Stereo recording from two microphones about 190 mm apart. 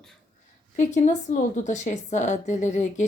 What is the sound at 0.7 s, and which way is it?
A woman's voice, 40° left (ahead or behind).